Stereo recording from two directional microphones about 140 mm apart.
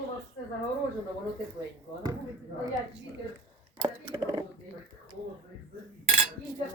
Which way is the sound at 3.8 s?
30° right (ahead or behind).